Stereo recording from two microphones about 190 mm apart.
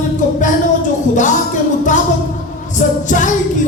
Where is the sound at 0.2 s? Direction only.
40° left (ahead or behind).